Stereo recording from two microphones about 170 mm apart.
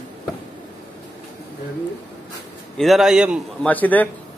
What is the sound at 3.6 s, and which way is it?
Speech, 10° left (ahead or behind).